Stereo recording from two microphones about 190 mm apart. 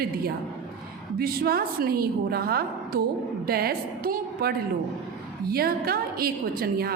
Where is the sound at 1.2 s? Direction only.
55° right (ahead or behind).